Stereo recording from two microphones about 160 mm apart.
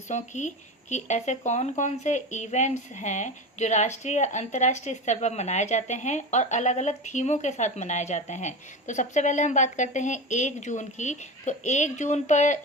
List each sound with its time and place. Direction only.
0.1 s speech: 50° left (ahead or behind)